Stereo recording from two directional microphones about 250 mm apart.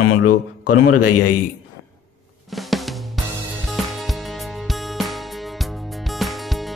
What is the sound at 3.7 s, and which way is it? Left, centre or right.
Music, centre.